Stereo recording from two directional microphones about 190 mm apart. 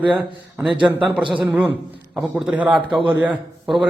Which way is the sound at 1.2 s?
25° right (ahead or behind).